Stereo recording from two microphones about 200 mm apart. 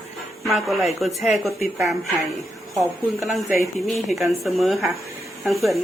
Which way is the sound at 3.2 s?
Centre (ahead or behind).